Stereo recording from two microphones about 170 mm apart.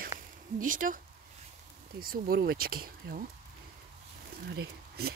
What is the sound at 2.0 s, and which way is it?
Speech, 60° right (ahead or behind).